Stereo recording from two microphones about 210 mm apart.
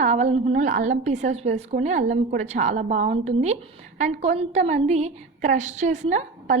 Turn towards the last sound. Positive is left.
turn(degrees=-35)  # may be behind; listen again after turning